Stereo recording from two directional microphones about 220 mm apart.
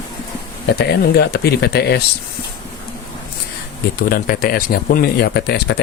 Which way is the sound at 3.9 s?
40° left (ahead or behind).